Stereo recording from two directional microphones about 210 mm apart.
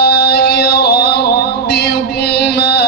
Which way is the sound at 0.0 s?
50° left (ahead or behind).